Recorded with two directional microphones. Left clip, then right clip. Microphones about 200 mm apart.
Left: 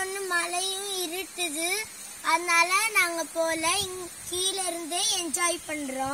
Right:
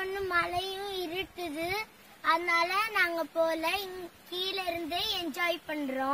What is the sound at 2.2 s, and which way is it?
Speech, centre (ahead or behind).